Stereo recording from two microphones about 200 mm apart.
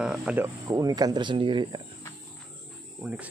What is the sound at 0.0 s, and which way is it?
Speech, 5° right (ahead or behind).